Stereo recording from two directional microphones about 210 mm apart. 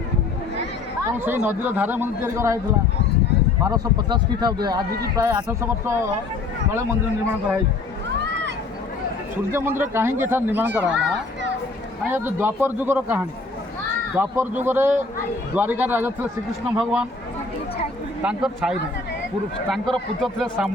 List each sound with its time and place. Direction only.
1.2 s a man's voice: 10° right (ahead or behind)
3.6 s a man's voice: 20° right (ahead or behind)
8.2 s a sound: 55° right (ahead or behind)
9.5 s a man's voice: 10° right (ahead or behind)
18.2 s a man's voice: 5° right (ahead or behind)
19.7 s a man's voice: centre (ahead or behind)